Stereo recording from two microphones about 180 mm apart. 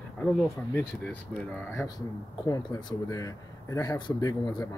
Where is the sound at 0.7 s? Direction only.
5° left (ahead or behind).